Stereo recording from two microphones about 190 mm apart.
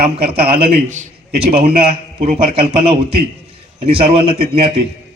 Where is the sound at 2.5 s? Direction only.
30° right (ahead or behind).